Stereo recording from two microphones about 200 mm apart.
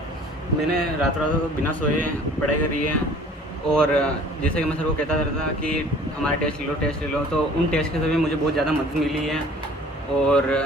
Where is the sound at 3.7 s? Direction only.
5° left (ahead or behind).